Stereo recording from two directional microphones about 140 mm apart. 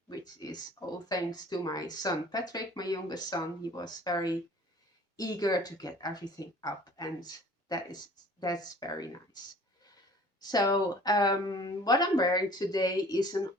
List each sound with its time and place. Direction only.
0.1 s speech: 30° left (ahead or behind)
10.4 s speech: 30° left (ahead or behind)